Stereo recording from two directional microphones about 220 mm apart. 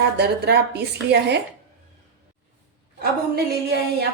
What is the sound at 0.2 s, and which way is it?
Speech, 50° right (ahead or behind).